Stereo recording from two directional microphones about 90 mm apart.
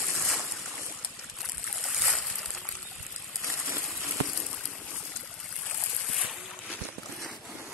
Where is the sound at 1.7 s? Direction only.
Centre (ahead or behind).